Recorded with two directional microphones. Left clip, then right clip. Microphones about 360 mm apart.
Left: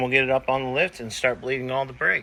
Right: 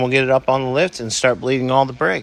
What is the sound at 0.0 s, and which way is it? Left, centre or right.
Speech, right.